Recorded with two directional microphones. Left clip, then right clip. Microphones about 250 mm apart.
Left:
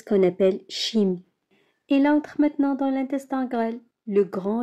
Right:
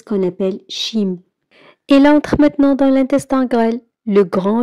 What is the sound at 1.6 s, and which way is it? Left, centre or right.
A woman's voice, right.